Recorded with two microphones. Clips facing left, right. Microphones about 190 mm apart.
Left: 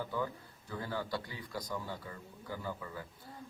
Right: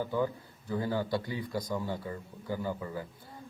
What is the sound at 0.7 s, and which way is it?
Speech, 30° right (ahead or behind).